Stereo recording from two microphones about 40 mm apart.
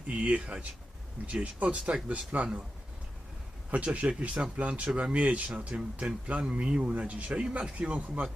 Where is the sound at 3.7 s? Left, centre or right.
Right.